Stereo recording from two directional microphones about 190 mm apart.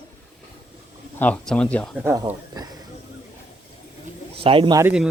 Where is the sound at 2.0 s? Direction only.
15° right (ahead or behind).